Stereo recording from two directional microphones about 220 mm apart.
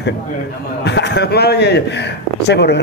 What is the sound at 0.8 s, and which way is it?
A man's voice, 50° left (ahead or behind).